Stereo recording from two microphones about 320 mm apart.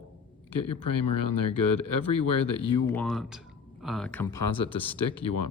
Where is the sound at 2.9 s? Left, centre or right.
Centre.